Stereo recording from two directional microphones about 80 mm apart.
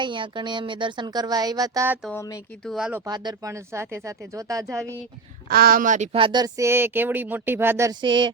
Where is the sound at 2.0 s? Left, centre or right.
Centre.